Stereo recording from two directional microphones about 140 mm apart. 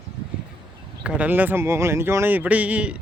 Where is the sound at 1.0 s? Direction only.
10° right (ahead or behind).